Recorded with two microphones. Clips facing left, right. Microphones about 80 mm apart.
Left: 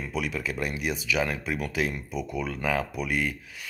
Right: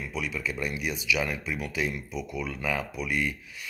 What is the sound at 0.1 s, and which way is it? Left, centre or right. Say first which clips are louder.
Speech: left 3 dB; left.